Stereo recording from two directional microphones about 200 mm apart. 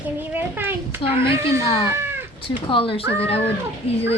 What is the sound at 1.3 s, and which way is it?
Speech, 15° right (ahead or behind).